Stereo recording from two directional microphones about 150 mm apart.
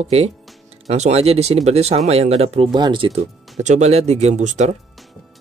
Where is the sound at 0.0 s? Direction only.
45° right (ahead or behind).